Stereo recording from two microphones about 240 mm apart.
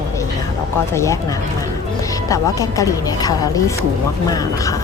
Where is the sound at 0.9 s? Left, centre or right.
Centre.